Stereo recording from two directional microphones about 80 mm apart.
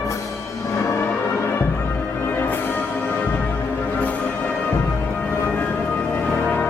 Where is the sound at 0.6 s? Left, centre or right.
Left.